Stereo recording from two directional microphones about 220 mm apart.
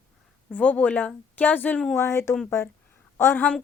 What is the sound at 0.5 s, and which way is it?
A woman's voice, 5° left (ahead or behind).